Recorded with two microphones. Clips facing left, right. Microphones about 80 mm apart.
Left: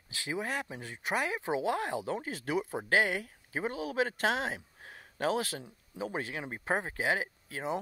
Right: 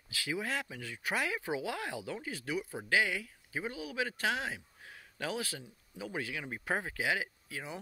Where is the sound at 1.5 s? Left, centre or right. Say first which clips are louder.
Left 5 dB; left.